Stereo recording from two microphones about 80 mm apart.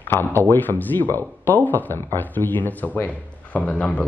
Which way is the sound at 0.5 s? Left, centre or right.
Left.